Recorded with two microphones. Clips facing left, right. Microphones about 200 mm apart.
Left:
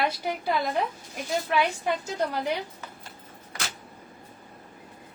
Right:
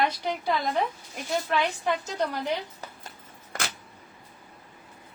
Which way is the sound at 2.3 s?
10° left (ahead or behind).